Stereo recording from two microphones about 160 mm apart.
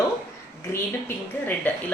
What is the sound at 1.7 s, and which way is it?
Speech, 10° left (ahead or behind).